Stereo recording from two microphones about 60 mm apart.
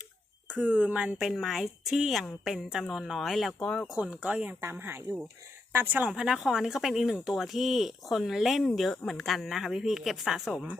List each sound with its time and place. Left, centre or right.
0.6 s speech: right
1.2 s speech: centre
3.6 s speech: centre
4.1 s speech: right
4.7 s speech: right
6.1 s speech: centre